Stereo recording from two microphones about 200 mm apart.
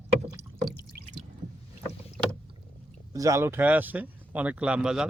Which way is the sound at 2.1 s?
5° left (ahead or behind).